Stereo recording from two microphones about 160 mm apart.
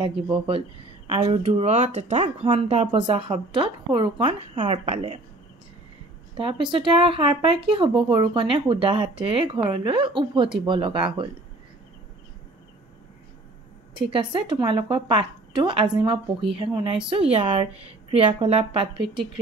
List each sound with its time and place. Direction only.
1.0 s a woman's voice: 35° right (ahead or behind)
6.3 s a woman's voice: 30° right (ahead or behind)
14.1 s a woman's voice: 30° right (ahead or behind)